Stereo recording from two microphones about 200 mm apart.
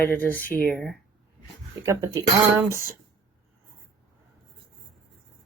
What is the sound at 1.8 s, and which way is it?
Speech, 15° right (ahead or behind).